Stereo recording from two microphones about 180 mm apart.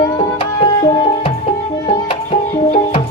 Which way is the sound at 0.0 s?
30° left (ahead or behind).